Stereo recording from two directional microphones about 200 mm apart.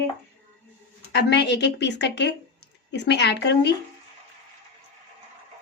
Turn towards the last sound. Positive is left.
turn(degrees=55)  # may be behind; listen again after turning